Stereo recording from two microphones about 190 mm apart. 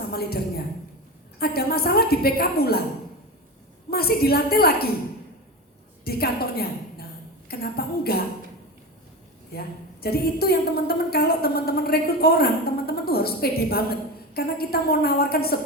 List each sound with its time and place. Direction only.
0.1 s a sound: 55° left (ahead or behind)
1.4 s a woman's voice: 55° left (ahead or behind)
3.8 s a woman's voice: 55° left (ahead or behind)
6.1 s a woman's voice: 55° left (ahead or behind)
9.5 s a woman's voice: 55° left (ahead or behind)